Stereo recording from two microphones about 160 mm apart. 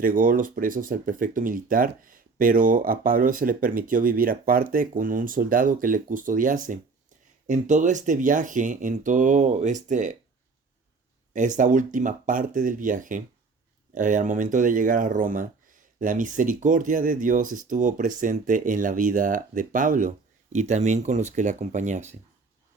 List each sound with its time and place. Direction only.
0.0 s speech: 60° right (ahead or behind)
11.3 s speech: 50° right (ahead or behind)